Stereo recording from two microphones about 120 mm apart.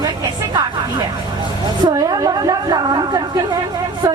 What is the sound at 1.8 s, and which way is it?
A woman's voice, 35° right (ahead or behind).